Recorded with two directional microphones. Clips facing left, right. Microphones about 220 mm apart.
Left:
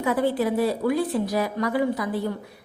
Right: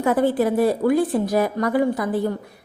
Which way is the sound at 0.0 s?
50° right (ahead or behind).